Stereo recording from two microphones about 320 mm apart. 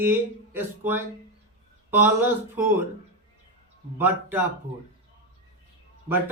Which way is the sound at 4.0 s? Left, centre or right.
Centre.